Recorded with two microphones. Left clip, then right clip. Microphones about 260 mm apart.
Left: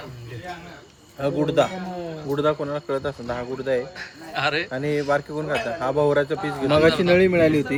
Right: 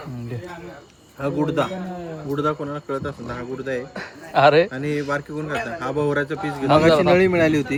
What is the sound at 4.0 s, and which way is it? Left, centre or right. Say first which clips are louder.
Speech: right 9 dB; centre.